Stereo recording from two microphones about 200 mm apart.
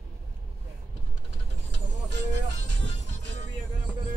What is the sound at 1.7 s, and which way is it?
Music, 60° right (ahead or behind).